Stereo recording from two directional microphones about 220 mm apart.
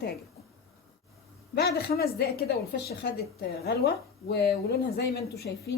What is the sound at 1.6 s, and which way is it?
A woman's voice, 45° left (ahead or behind).